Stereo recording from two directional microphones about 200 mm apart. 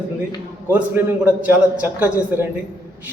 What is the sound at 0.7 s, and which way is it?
A man's voice, 10° right (ahead or behind).